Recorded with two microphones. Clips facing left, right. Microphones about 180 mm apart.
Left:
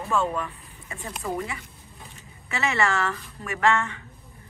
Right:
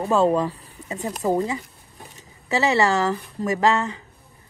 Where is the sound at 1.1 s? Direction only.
35° right (ahead or behind).